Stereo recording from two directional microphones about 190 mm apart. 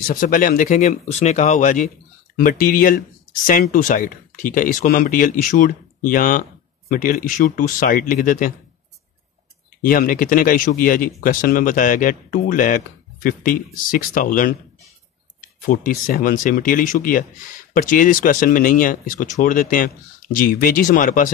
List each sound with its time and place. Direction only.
0.0 s speech: 45° left (ahead or behind)
9.8 s speech: 45° left (ahead or behind)
15.6 s speech: 45° left (ahead or behind)